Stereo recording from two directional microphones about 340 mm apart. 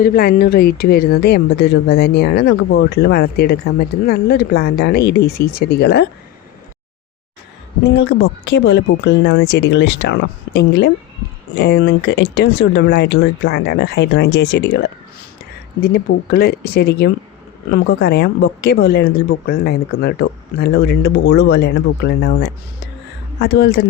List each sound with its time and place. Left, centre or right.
0.0 s speech: left
7.9 s speech: left